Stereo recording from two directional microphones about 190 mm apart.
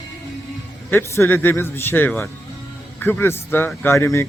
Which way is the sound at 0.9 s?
10° left (ahead or behind).